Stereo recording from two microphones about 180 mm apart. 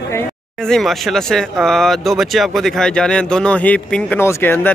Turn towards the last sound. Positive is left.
turn(degrees=10)  # may be behind; listen again after turning